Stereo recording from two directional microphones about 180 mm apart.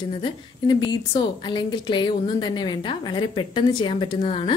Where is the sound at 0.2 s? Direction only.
25° left (ahead or behind).